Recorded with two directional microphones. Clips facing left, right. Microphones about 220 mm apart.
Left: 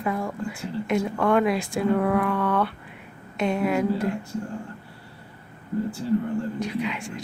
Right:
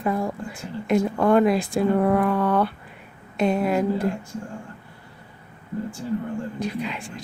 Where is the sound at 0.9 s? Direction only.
35° right (ahead or behind).